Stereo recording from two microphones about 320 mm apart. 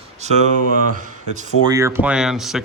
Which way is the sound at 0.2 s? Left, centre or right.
Right.